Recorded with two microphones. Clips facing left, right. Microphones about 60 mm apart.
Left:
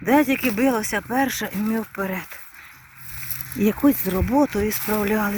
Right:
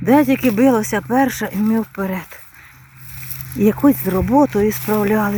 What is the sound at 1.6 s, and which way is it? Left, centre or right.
Speech, centre.